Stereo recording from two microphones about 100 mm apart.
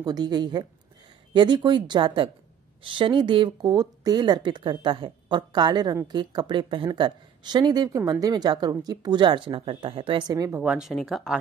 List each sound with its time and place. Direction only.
0.0 s speech: 45° right (ahead or behind)
10.6 s speech: 10° right (ahead or behind)
10.9 s speech: centre (ahead or behind)